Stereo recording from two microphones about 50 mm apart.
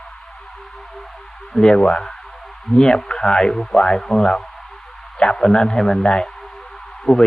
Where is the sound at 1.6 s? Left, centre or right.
Centre.